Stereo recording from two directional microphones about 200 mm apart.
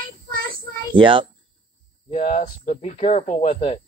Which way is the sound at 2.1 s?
35° left (ahead or behind).